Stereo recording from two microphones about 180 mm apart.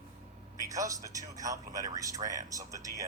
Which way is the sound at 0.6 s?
20° right (ahead or behind).